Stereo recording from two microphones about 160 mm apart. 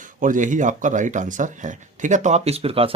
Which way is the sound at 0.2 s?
55° right (ahead or behind).